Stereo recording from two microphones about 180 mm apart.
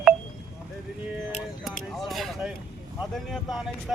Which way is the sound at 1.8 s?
Centre (ahead or behind).